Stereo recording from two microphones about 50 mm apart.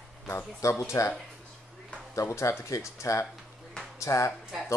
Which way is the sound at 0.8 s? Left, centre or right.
Left.